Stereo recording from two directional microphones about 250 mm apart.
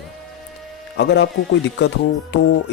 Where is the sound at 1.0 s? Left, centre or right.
Left.